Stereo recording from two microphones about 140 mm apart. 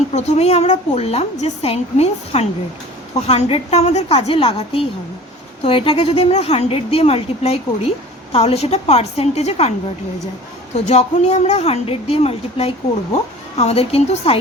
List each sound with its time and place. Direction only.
0.1 s a woman's voice: 50° left (ahead or behind)
10.8 s a woman's voice: 55° left (ahead or behind)